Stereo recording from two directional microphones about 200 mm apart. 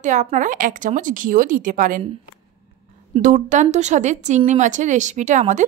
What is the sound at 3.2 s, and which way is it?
Speech, 40° right (ahead or behind).